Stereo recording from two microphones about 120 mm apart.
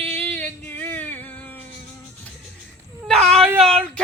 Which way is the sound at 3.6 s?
5° left (ahead or behind).